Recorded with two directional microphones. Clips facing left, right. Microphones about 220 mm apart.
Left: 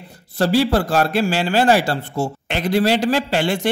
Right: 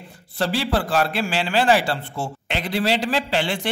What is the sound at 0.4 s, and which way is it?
A man's voice, 40° left (ahead or behind).